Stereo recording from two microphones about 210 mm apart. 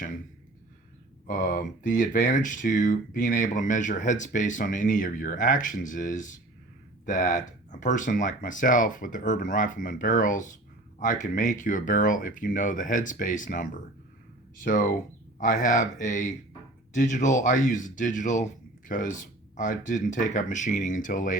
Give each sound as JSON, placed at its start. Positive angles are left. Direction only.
{"t": 1.3, "sound": "speech", "side_deg": 40}